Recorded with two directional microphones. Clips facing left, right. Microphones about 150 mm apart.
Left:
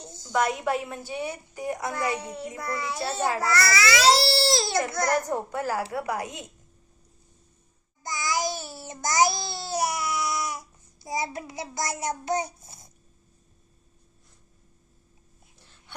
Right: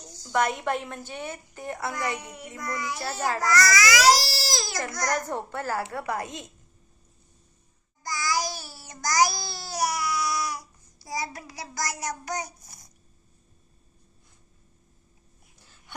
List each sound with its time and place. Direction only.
0.0 s a sound: 20° left (ahead or behind)
0.3 s a woman's voice: centre (ahead or behind)
2.1 s a child's voice: 30° left (ahead or behind)
5.1 s a woman's voice: 10° left (ahead or behind)
8.0 s babbling: 20° left (ahead or behind)